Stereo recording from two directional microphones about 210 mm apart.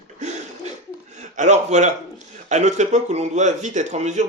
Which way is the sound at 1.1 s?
35° right (ahead or behind).